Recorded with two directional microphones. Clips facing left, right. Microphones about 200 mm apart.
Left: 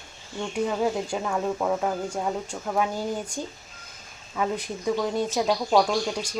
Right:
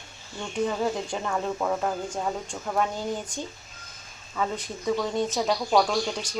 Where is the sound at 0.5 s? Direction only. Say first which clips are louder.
Left 1 dB; 10° left (ahead or behind).